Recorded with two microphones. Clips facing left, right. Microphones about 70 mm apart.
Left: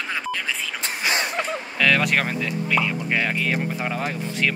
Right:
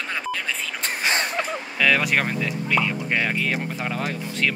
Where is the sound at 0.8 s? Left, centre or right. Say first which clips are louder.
Right 1 dB; right.